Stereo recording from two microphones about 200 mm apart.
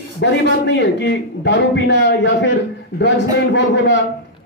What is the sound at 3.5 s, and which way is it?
Speech, 65° left (ahead or behind).